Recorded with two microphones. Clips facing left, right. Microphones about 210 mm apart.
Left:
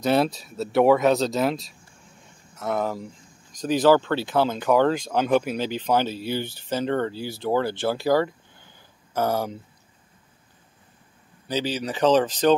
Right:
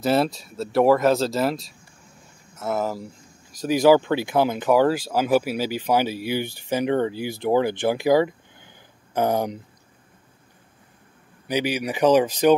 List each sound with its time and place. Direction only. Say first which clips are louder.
0.0 s speech: even; centre (ahead or behind); by 9.6 s 15° right (ahead or behind)
11.4 s speech: right 2 dB; 15° right (ahead or behind)